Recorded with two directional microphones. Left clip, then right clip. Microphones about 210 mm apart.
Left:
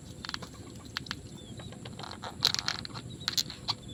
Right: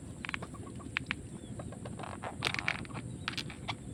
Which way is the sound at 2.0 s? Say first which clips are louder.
Left 7 dB; 30° right (ahead or behind).